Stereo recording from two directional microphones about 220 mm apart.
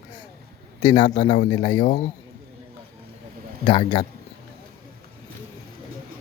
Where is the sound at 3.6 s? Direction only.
25° left (ahead or behind).